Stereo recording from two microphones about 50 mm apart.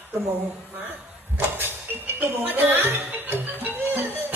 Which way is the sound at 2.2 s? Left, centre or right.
Right.